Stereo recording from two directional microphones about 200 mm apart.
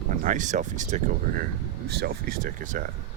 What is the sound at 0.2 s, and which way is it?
Speech, 40° right (ahead or behind).